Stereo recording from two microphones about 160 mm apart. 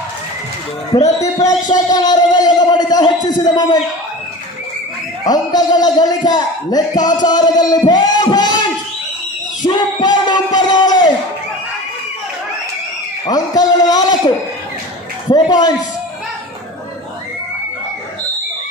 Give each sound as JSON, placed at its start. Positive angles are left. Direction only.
{"t": 1.2, "sound": "music", "side_deg": 20}
{"t": 5.2, "sound": "speech", "side_deg": 25}
{"t": 9.6, "sound": "bellow", "side_deg": 25}
{"t": 13.2, "sound": "a sound", "side_deg": 25}
{"t": 15.3, "sound": "speech", "side_deg": 25}